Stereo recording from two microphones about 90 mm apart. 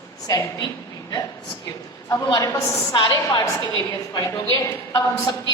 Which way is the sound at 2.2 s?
40° left (ahead or behind).